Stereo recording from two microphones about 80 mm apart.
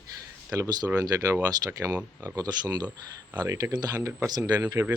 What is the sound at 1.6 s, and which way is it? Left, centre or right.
Speech, right.